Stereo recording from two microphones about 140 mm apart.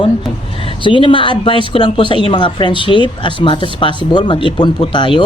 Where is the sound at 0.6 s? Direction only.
35° left (ahead or behind).